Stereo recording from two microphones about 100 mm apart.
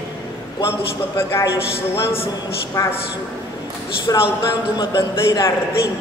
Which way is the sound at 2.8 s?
30° left (ahead or behind).